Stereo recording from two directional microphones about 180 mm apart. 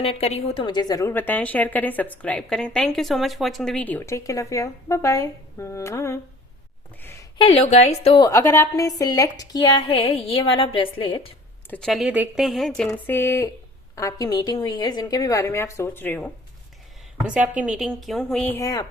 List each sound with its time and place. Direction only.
0.0 s speech: 35° left (ahead or behind); by 6.1 s 15° left (ahead or behind)
7.0 s a sound: 10° left (ahead or behind)
7.3 s a woman's voice: 30° left (ahead or behind)
8.2 s a woman's voice: 15° left (ahead or behind)
11.7 s a woman's voice: centre (ahead or behind)
17.2 s speech: 5° right (ahead or behind); by 18.9 s 20° left (ahead or behind)